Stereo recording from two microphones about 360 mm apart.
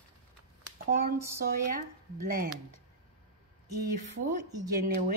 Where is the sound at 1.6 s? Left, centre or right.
Right.